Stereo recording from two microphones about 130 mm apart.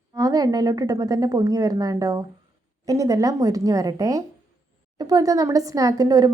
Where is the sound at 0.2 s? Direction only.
30° right (ahead or behind).